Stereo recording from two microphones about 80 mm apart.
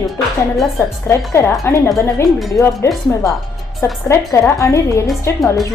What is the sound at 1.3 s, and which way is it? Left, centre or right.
A woman's voice, left.